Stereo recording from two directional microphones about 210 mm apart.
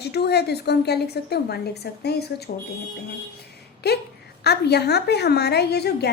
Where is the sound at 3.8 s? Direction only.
50° left (ahead or behind).